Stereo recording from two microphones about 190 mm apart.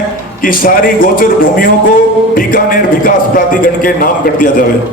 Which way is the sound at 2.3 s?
50° left (ahead or behind).